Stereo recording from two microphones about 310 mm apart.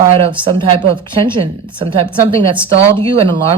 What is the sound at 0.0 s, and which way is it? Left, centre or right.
A woman's voice, centre.